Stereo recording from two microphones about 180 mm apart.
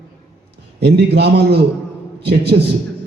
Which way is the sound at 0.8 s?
65° right (ahead or behind).